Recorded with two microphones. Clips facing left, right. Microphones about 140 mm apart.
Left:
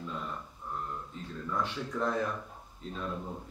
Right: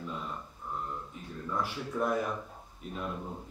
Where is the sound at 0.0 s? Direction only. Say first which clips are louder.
Even; 15° right (ahead or behind).